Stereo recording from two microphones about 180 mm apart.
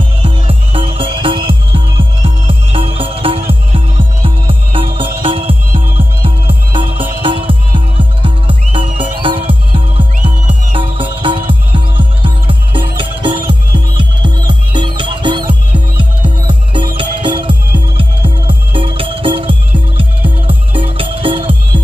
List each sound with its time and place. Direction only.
0.2 s music: 30° right (ahead or behind)